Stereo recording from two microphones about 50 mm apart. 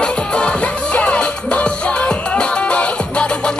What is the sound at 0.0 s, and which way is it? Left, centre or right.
Music, left.